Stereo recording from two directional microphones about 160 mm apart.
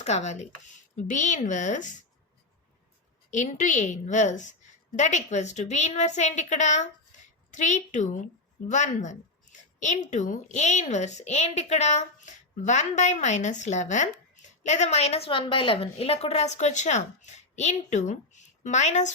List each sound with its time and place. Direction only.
0.0 s a woman's voice: 45° left (ahead or behind)
3.2 s a woman's voice: 50° left (ahead or behind)